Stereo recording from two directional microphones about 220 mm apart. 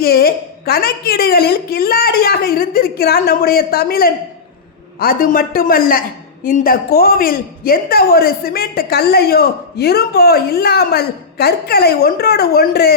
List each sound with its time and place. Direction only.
0.0 s a woman's voice: 45° left (ahead or behind)